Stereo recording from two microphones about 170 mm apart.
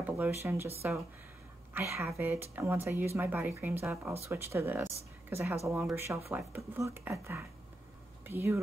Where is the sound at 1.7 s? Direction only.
15° right (ahead or behind).